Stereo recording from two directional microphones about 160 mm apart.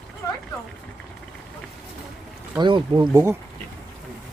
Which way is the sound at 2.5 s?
30° right (ahead or behind).